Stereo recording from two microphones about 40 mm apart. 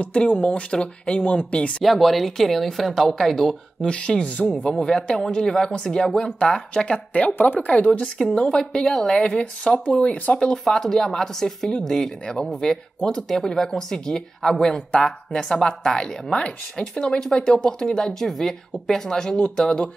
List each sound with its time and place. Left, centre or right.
0.0 s speech: left
1.8 s speech: centre
3.8 s speech: left
4.6 s a woman's voice: centre
7.2 s a woman's voice: left
7.6 s speech: left
8.5 s speech: centre
9.2 s speech: left
10.4 s a woman's voice: centre